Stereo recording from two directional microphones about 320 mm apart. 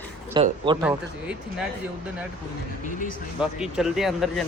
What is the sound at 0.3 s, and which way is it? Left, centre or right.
Speech, centre.